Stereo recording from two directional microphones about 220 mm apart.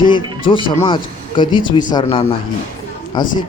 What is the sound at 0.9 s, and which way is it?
A man's voice, 20° left (ahead or behind).